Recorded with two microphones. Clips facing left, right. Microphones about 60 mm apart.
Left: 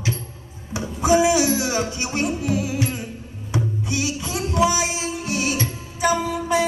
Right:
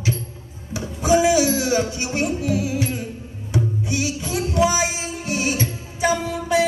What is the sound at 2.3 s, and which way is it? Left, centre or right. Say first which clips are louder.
Music: right 1 dB; left.